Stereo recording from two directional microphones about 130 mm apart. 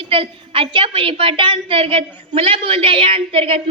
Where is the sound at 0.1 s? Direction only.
45° right (ahead or behind).